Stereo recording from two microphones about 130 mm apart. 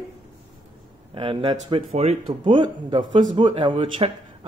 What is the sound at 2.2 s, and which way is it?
A man's voice, 40° right (ahead or behind).